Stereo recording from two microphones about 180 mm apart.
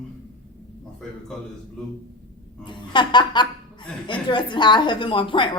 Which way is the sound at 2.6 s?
25° left (ahead or behind).